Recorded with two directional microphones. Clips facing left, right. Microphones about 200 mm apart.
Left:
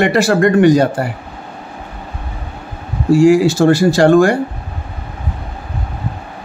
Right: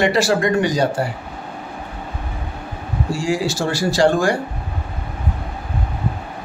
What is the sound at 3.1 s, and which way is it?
Speech, 55° left (ahead or behind).